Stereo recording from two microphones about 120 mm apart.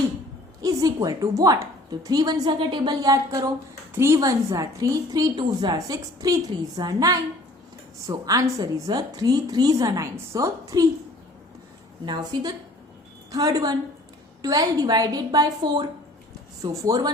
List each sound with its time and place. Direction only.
0.6 s a woman's voice: 30° right (ahead or behind)
2.6 s a woman's voice: 45° right (ahead or behind); by 10.8 s 30° right (ahead or behind)
12.0 s a woman's voice: 35° right (ahead or behind)